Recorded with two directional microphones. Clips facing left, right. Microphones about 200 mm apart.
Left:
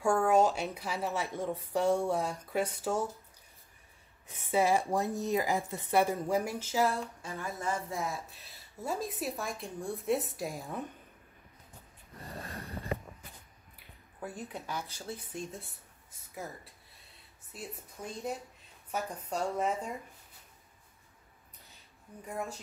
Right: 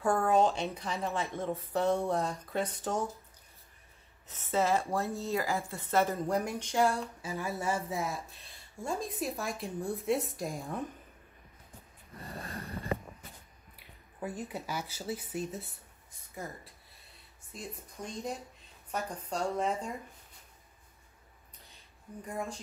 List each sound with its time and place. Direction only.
0.0 s a woman's voice: 10° left (ahead or behind)
4.3 s a woman's voice: 15° left (ahead or behind)
14.3 s a woman's voice: 5° right (ahead or behind)
22.2 s speech: 5° left (ahead or behind)